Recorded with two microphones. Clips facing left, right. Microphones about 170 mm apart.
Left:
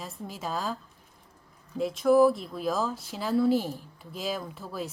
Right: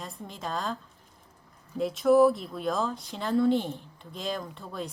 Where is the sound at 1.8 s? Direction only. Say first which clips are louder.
Even; centre (ahead or behind).